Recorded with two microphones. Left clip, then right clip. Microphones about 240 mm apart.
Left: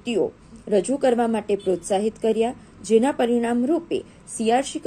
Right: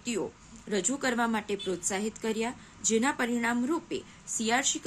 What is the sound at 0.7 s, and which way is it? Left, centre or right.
A woman's voice, centre.